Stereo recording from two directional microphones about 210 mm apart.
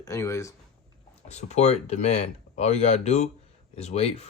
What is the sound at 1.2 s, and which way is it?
Speech, 30° left (ahead or behind).